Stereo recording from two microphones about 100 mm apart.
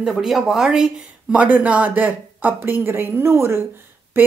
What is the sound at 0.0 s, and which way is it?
A woman's voice, 5° right (ahead or behind).